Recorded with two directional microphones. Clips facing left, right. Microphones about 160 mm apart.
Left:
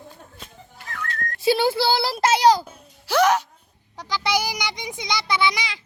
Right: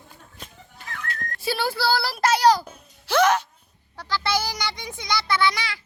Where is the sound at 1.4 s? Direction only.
20° left (ahead or behind).